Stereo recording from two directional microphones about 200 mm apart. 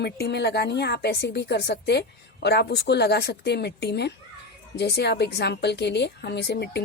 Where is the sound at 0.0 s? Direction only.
55° left (ahead or behind).